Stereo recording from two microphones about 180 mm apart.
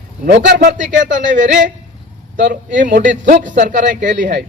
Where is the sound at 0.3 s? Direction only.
65° right (ahead or behind).